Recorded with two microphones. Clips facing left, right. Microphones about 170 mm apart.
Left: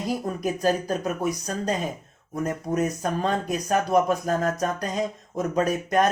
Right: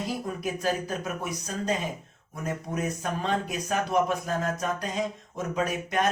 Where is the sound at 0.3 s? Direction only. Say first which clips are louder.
Left 5 dB; 40° left (ahead or behind).